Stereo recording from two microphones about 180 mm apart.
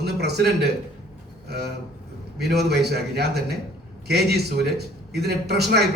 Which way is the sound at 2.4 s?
65° right (ahead or behind).